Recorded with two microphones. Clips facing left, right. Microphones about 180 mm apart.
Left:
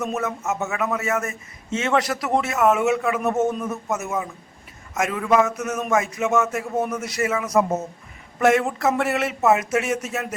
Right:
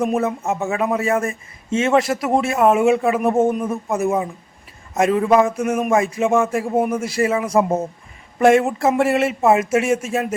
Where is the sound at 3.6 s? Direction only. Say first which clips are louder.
Right 6 dB; 30° right (ahead or behind).